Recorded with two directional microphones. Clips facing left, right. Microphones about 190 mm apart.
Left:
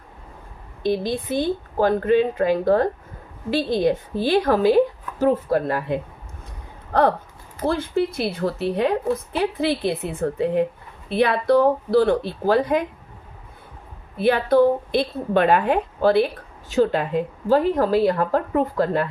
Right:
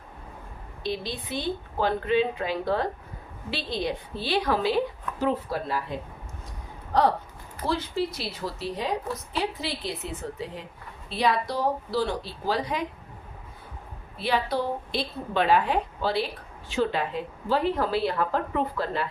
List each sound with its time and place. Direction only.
0.8 s a woman's voice: 50° left (ahead or behind)
14.2 s a woman's voice: 55° left (ahead or behind)